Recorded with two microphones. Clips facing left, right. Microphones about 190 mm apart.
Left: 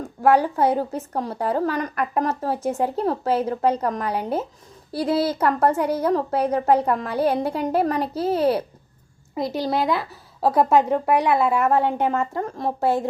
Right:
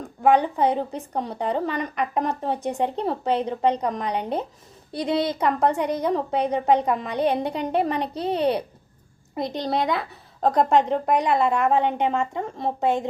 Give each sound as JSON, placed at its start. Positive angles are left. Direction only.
{"t": 0.0, "sound": "a woman's voice", "side_deg": 5}
{"t": 12.8, "sound": "a woman's voice", "side_deg": -15}